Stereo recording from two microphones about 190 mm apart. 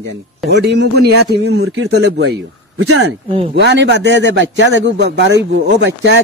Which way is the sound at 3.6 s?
60° right (ahead or behind).